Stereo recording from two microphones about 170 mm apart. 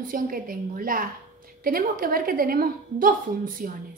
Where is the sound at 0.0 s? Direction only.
55° right (ahead or behind).